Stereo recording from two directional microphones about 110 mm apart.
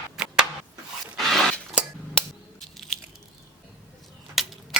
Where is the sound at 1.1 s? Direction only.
Centre (ahead or behind).